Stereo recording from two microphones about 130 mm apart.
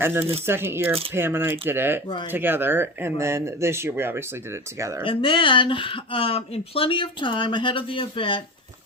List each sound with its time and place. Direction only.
0.0 s speech: 20° right (ahead or behind)
5.0 s speech: 40° left (ahead or behind)